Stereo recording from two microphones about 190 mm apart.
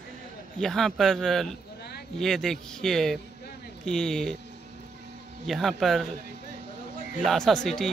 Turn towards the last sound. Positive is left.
turn(degrees=0)  # may be behind; listen again after turning